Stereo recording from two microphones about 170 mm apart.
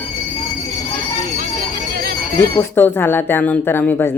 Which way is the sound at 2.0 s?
60° right (ahead or behind).